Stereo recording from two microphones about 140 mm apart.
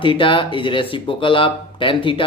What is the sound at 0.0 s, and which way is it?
Speech, 35° left (ahead or behind).